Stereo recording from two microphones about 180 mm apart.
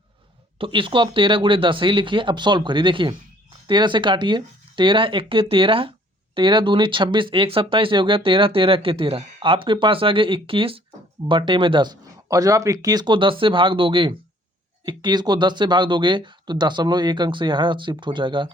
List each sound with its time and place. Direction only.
0.6 s speech: 30° right (ahead or behind)